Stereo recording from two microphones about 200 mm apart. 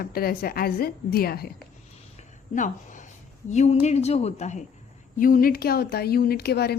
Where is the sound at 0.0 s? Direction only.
50° left (ahead or behind).